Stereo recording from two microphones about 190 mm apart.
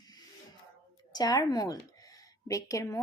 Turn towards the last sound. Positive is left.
turn(degrees=15)  # may be behind; listen again after turning